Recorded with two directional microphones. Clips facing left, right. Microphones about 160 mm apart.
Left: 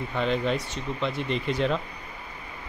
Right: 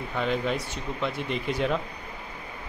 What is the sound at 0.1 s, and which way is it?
Speech, 5° right (ahead or behind).